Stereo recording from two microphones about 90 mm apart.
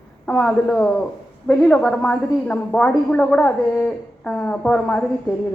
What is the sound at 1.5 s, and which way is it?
A woman's voice, 10° left (ahead or behind).